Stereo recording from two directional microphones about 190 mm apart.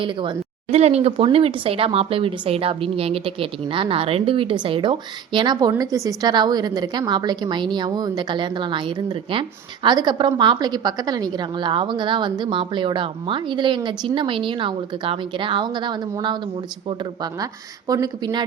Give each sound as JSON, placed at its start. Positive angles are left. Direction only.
{"t": 0.0, "sound": "speech", "side_deg": -25}
{"t": 17.4, "sound": "speech", "side_deg": -20}